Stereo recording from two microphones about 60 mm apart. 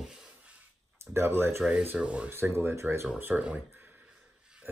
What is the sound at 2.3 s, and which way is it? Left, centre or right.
Speech, right.